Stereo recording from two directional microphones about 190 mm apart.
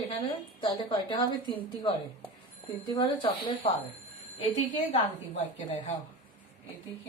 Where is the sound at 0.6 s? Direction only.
25° left (ahead or behind).